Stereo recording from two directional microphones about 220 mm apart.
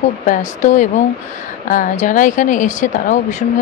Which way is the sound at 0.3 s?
35° left (ahead or behind).